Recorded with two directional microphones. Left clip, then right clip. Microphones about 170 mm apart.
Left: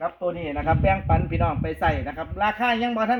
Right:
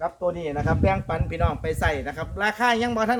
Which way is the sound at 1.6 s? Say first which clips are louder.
Left 1 dB; 20° right (ahead or behind).